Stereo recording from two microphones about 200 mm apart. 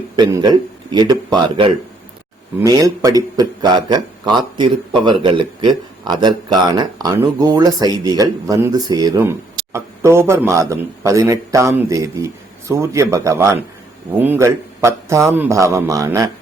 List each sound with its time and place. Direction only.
0.2 s a man's voice: 20° right (ahead or behind)